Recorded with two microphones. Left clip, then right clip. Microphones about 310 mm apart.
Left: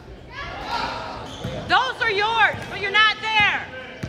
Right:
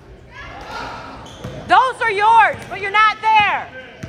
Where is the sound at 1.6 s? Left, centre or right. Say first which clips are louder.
Right 6 dB; centre.